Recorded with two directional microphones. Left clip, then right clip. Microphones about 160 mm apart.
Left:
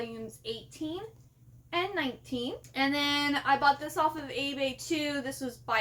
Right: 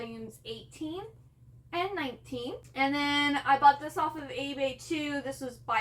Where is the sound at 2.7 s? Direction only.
45° left (ahead or behind).